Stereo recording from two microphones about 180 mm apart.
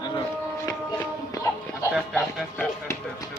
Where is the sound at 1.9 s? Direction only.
Centre (ahead or behind).